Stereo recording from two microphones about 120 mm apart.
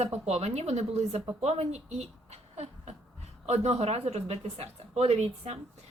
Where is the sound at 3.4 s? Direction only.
65° right (ahead or behind).